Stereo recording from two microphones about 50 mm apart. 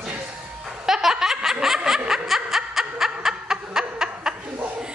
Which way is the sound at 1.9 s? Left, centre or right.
Centre.